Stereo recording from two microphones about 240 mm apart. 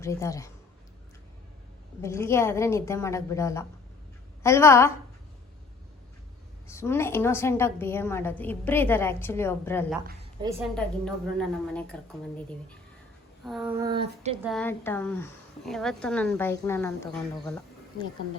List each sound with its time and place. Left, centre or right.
0.0 s a woman's voice: centre
2.0 s a woman's voice: centre
6.7 s a woman's voice: centre
13.4 s speech: centre
13.7 s speech: centre
14.4 s speech: centre